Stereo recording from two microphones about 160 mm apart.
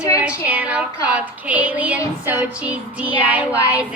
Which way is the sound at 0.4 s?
10° right (ahead or behind).